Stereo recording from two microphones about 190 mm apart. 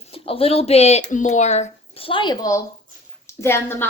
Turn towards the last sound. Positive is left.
turn(degrees=15)  # may be behind; listen again after turning